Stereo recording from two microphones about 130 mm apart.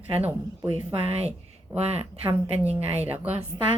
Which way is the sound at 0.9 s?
50° right (ahead or behind).